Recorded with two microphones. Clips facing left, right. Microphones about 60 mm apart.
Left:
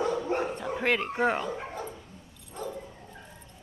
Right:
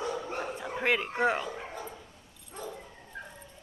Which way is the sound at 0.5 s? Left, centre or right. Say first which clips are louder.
Left 1 dB; centre.